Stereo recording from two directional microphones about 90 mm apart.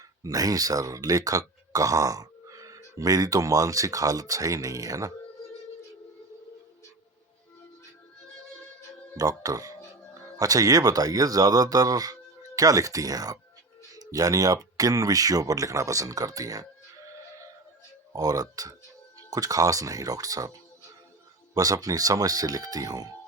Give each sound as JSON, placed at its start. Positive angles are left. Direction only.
{"t": 0.2, "sound": "speech", "side_deg": -40}
{"t": 9.1, "sound": "speech", "side_deg": -40}
{"t": 18.1, "sound": "speech", "side_deg": -40}